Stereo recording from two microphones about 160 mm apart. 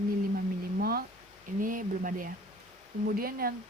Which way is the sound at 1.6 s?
60° right (ahead or behind).